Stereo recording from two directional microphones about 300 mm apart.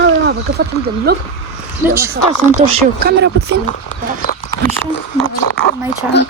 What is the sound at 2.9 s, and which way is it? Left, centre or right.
Speech, right.